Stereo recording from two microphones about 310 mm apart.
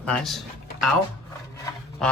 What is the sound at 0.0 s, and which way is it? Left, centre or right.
A man's voice, centre.